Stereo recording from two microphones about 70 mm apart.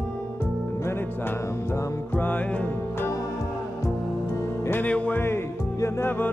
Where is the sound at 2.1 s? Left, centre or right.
Left.